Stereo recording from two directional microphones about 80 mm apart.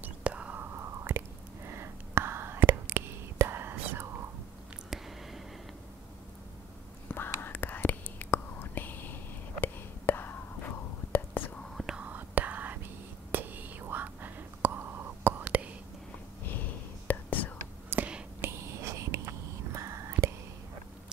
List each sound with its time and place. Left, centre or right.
0.0 s whispering: centre
0.7 s whispering: right
7.1 s whispering: left
11.7 s whispering: centre
12.0 s whispering: right
17.1 s whispering: left
17.8 s whispering: right
18.4 s whispering: right